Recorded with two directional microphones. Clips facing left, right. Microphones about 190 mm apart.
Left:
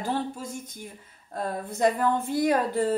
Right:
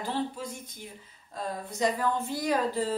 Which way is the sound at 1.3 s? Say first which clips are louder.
Left 4 dB; 55° left (ahead or behind).